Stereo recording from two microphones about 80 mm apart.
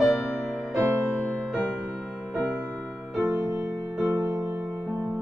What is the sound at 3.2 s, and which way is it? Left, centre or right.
Music, right.